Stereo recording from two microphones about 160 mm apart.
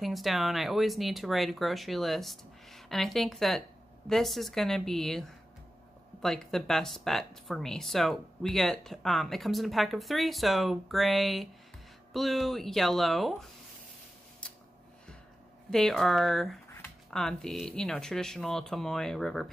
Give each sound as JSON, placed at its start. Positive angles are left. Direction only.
{"t": 0.0, "sound": "speech", "side_deg": 0}
{"t": 6.2, "sound": "speech", "side_deg": 5}
{"t": 15.7, "sound": "speech", "side_deg": 5}